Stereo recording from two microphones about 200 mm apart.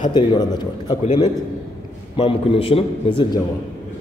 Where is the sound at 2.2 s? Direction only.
25° left (ahead or behind).